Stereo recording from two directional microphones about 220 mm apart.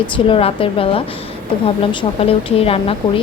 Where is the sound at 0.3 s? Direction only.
25° left (ahead or behind).